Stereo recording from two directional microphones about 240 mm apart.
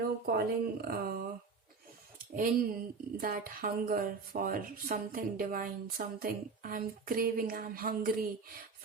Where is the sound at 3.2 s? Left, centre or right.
Right.